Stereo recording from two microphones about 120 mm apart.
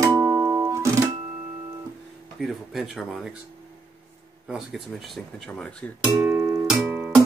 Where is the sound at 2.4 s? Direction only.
Centre (ahead or behind).